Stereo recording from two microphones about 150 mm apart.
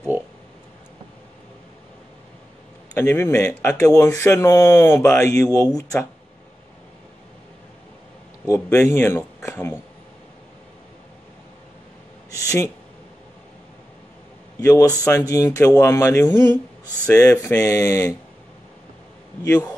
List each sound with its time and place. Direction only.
2.9 s speech: 15° left (ahead or behind)
8.5 s speech: 20° left (ahead or behind)
12.3 s a sound: 20° left (ahead or behind)
14.6 s a man's voice: 20° left (ahead or behind)
19.4 s speech: 15° left (ahead or behind)